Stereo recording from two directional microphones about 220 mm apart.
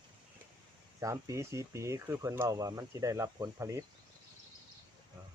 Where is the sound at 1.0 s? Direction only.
15° right (ahead or behind).